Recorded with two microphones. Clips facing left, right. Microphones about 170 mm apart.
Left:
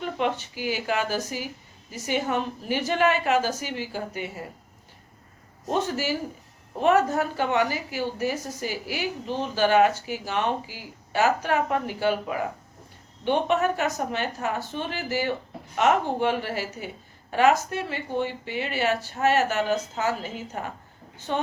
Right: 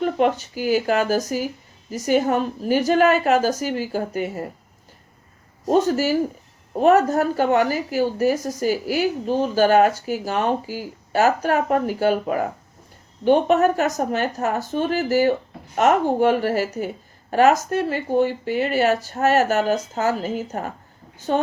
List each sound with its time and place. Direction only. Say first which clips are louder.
0.0 s a woman's voice: right 7 dB; 45° right (ahead or behind)
5.6 s a woman's voice: right 8 dB; 40° right (ahead or behind)